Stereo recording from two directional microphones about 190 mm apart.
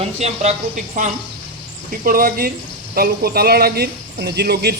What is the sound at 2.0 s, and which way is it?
Speech, 50° right (ahead or behind).